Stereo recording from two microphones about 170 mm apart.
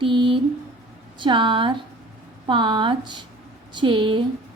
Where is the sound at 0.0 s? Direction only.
30° right (ahead or behind).